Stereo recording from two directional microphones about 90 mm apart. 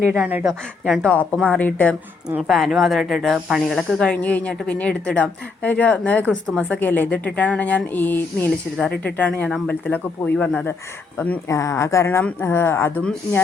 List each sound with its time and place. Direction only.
0.1 s speech: 15° right (ahead or behind)
1.0 s speech: 15° left (ahead or behind)
2.5 s speech: centre (ahead or behind)
4.1 s speech: 15° left (ahead or behind)
11.4 s a woman's voice: 35° left (ahead or behind)